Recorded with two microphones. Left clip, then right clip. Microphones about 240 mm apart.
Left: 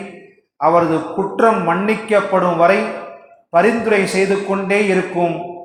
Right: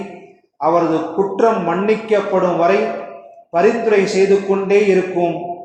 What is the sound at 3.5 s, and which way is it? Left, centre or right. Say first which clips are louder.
Speech: even; left.